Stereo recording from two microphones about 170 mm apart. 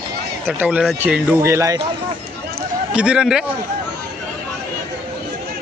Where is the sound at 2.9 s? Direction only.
5° right (ahead or behind).